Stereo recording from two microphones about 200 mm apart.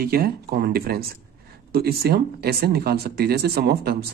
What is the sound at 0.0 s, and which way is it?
Speech, 50° right (ahead or behind).